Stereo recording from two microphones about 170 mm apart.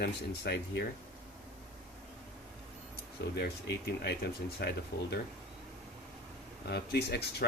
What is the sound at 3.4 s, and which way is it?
Speech, 75° left (ahead or behind).